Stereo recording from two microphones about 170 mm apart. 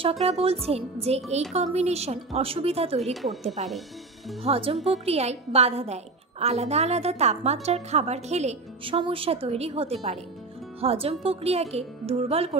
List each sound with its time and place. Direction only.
0.0 s a woman's voice: 35° right (ahead or behind)
3.0 s speech: centre (ahead or behind)
4.4 s a woman's voice: 35° right (ahead or behind)